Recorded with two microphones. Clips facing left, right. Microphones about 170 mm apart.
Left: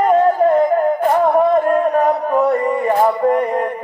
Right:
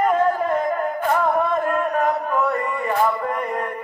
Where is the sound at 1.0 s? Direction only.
35° left (ahead or behind).